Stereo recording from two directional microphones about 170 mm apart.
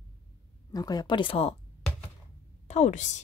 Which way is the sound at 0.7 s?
20° left (ahead or behind).